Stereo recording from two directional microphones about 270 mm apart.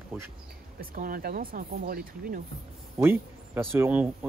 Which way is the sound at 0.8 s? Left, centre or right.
Right.